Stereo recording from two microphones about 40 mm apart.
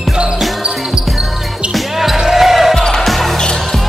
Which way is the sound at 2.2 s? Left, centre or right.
Centre.